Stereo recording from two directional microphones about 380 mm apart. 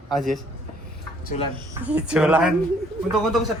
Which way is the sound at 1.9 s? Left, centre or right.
Centre.